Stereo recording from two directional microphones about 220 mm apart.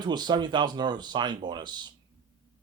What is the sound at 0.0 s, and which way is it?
Speech, 20° right (ahead or behind).